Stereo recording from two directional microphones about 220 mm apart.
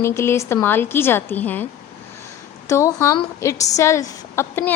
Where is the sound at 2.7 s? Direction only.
15° left (ahead or behind).